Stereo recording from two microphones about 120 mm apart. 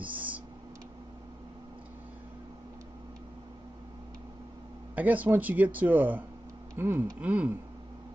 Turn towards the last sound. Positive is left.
turn(degrees=-10)  # may be behind; listen again after turning